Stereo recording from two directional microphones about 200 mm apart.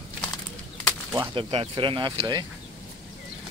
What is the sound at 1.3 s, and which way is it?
Speech, 25° right (ahead or behind).